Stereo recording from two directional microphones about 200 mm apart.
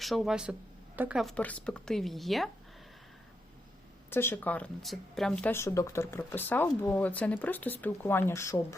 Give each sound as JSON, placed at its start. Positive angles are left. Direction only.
{"t": 0.0, "sound": "speech", "side_deg": 0}
{"t": 4.1, "sound": "speech", "side_deg": 10}